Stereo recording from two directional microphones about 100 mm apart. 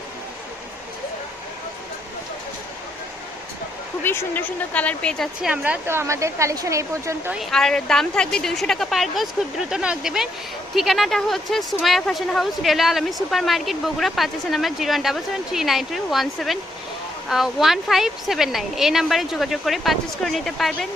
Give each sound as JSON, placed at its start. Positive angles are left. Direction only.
{"t": 4.0, "sound": "speech", "side_deg": 20}
{"t": 5.2, "sound": "speech", "side_deg": -10}
{"t": 5.9, "sound": "speech", "side_deg": -25}
{"t": 7.3, "sound": "speech", "side_deg": 5}